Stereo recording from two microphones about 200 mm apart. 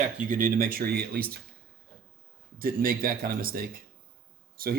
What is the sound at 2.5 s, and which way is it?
Speech, 45° right (ahead or behind).